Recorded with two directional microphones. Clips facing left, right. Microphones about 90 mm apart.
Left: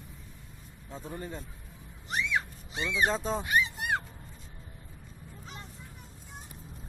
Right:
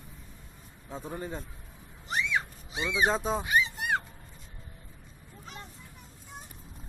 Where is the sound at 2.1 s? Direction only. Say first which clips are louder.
Right 1 dB; 5° right (ahead or behind).